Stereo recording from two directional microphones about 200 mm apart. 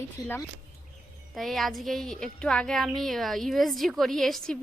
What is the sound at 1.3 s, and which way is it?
A woman's voice, centre (ahead or behind).